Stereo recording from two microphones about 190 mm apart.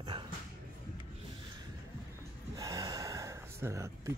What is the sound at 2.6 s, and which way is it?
Gasp, 20° right (ahead or behind).